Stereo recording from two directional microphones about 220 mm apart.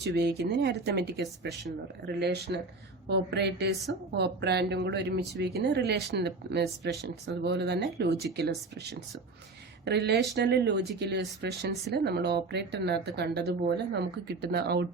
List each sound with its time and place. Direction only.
0.0 s a woman's voice: 50° right (ahead or behind)